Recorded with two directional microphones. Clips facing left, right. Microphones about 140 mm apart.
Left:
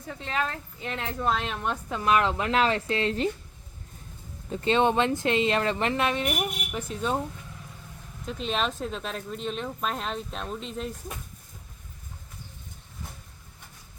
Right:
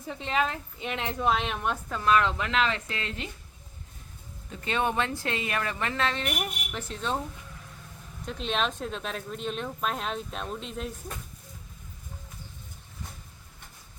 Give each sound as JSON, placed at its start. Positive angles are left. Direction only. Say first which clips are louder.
{"t": 0.1, "sound": "a woman's voice", "louder": "right 2 dB", "side_deg": -20}
{"t": 1.9, "sound": "speech", "louder": "even", "side_deg": 20}
{"t": 2.2, "sound": "speech", "louder": "left 3 dB", "side_deg": 30}
{"t": 4.4, "sound": "speech", "louder": "left 6 dB", "side_deg": 30}
{"t": 8.2, "sound": "speech", "louder": "left 1 dB", "side_deg": 0}